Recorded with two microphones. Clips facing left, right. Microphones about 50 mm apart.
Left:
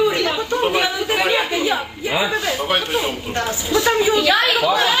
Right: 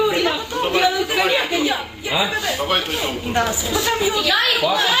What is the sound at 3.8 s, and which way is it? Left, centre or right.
Speech, left.